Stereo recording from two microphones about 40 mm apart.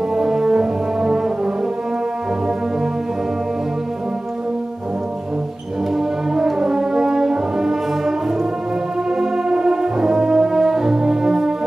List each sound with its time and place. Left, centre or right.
0.1 s brass instrument: centre
5.9 s brass instrument: centre
9.2 s brass instrument: centre